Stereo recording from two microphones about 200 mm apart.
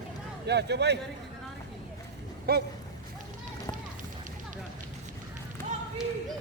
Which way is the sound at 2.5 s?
50° right (ahead or behind).